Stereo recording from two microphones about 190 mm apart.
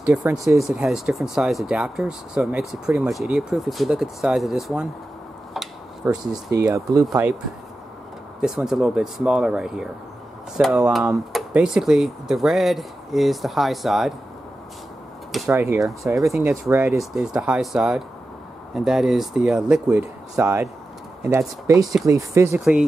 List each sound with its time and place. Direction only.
0.2 s speech: 15° right (ahead or behind)
0.6 s speech: centre (ahead or behind)
5.5 s a sound: centre (ahead or behind)
6.5 s speech: 20° right (ahead or behind)
8.4 s speech: 5° right (ahead or behind)
15.4 s speech: 15° right (ahead or behind)
17.0 s speech: centre (ahead or behind)
22.6 s speech: centre (ahead or behind)